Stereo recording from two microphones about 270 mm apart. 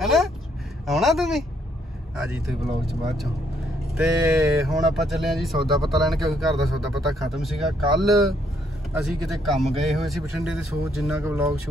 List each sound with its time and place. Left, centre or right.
0.0 s speech: centre
2.6 s speech: right
3.9 s speech: centre
9.0 s speech: centre